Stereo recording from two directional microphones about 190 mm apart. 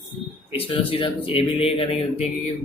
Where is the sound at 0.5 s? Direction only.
30° left (ahead or behind).